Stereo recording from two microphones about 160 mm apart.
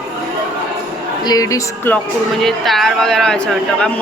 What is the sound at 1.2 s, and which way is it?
Speech, 20° left (ahead or behind).